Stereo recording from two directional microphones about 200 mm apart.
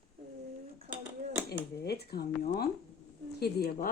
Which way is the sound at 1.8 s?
50° left (ahead or behind).